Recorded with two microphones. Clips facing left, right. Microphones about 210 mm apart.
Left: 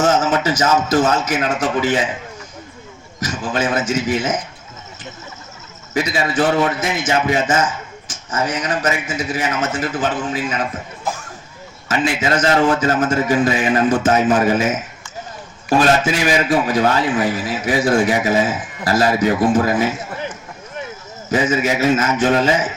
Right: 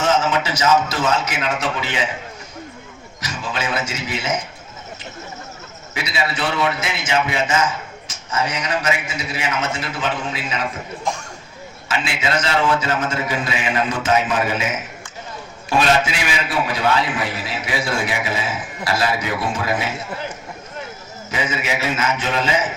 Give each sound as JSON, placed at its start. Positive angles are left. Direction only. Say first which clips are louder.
{"t": 0.0, "sound": "music", "louder": "left 3 dB", "side_deg": 50}
{"t": 0.9, "sound": "a man's voice", "louder": "left 5 dB", "side_deg": 50}
{"t": 3.2, "sound": "a man's voice", "louder": "left 5 dB", "side_deg": 50}
{"t": 5.9, "sound": "a man's voice", "louder": "left 5 dB", "side_deg": 45}
{"t": 11.9, "sound": "a man's voice", "louder": "left 5 dB", "side_deg": 45}
{"t": 15.8, "sound": "a man's voice", "louder": "left 2 dB", "side_deg": 45}
{"t": 21.2, "sound": "a man's voice", "louder": "left 7 dB", "side_deg": 50}